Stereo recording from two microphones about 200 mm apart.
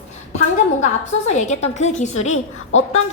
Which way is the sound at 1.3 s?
35° left (ahead or behind).